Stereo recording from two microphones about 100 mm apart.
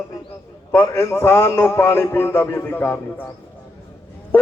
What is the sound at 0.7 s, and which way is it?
A man's voice, 20° left (ahead or behind).